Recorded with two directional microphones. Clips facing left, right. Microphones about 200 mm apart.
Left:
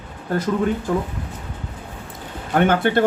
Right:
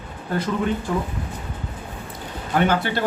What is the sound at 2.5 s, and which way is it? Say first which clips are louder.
Speech: left 4 dB; 55° left (ahead or behind).